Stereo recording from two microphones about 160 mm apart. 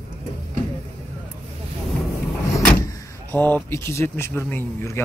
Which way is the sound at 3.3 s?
10° left (ahead or behind).